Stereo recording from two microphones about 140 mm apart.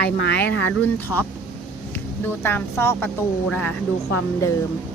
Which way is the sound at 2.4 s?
15° left (ahead or behind).